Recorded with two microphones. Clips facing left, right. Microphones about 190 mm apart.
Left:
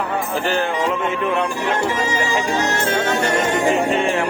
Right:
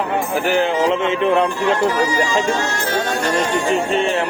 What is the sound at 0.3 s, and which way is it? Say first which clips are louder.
Speech: right 4 dB; 15° right (ahead or behind).